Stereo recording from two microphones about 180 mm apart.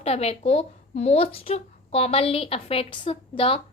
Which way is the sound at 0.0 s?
35° left (ahead or behind).